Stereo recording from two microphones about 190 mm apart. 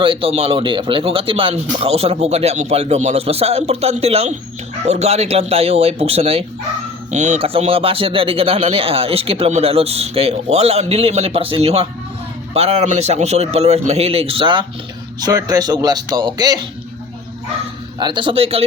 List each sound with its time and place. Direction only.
0.0 s speech: 30° right (ahead or behind)
18.0 s speech: 25° right (ahead or behind)